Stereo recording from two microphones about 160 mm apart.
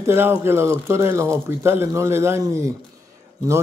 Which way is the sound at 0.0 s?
15° right (ahead or behind).